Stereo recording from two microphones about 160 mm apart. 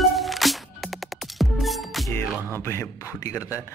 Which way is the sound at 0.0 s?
Centre (ahead or behind).